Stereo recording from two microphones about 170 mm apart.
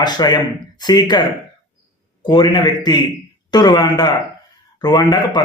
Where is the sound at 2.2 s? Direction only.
25° left (ahead or behind).